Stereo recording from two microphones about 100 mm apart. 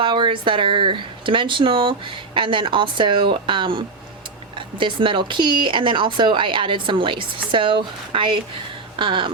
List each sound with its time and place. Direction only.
0.0 s speech: 55° right (ahead or behind)